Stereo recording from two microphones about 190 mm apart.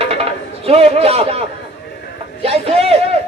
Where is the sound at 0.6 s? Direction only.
30° right (ahead or behind).